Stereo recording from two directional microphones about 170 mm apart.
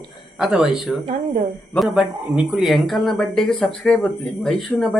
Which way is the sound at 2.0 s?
5° right (ahead or behind).